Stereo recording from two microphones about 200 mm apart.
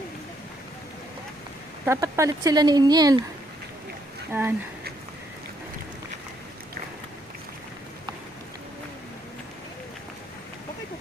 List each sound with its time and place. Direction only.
1.8 s speech: 15° right (ahead or behind)
4.3 s speech: 10° right (ahead or behind)